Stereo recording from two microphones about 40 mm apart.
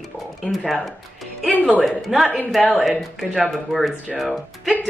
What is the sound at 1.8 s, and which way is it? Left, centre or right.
Speech, centre.